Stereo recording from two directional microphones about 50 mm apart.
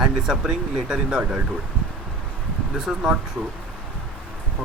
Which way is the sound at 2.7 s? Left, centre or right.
Centre.